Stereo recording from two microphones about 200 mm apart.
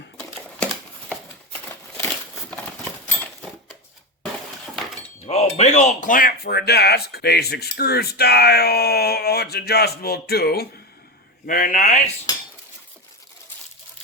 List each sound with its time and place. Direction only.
3.1 s a sound: 5° left (ahead or behind)
5.2 s speech: 30° left (ahead or behind)
12.3 s dishes: 20° left (ahead or behind)